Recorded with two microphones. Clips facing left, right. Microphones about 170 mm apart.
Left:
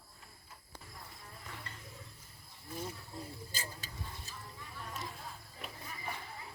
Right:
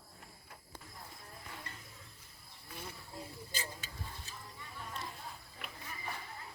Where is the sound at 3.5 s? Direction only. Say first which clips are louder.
Right 1 dB; 40° left (ahead or behind).